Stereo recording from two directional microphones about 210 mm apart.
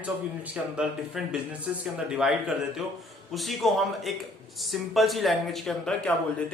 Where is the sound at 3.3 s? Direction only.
Centre (ahead or behind).